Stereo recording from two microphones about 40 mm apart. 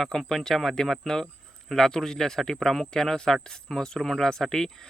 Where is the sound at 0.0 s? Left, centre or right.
Centre.